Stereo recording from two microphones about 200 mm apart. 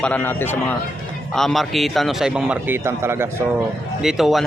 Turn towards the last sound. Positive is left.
turn(degrees=0)  # may be behind; listen again after turning